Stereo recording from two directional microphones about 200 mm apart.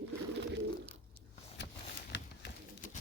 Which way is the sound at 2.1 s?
60° left (ahead or behind).